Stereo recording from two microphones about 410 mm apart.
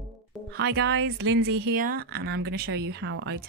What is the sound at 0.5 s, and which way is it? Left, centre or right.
Speech, right.